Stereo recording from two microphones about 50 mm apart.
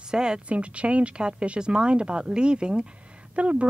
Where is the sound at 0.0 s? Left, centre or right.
Centre.